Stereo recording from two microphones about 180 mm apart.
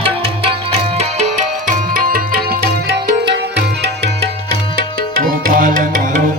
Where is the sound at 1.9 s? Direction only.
55° right (ahead or behind); by 4.1 s 70° right (ahead or behind).